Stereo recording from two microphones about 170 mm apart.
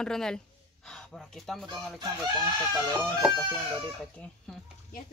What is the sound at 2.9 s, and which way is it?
Speech, 10° right (ahead or behind).